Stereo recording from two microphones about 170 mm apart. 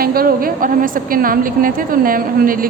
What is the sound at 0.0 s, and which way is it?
A woman's voice, 60° right (ahead or behind).